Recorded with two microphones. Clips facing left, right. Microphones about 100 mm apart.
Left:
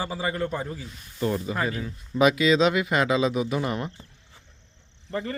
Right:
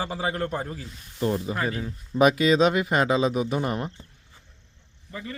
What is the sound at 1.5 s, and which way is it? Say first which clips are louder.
Speech: even; 30° right (ahead or behind).